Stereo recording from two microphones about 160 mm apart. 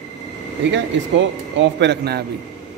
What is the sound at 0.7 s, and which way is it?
Speech, 90° right.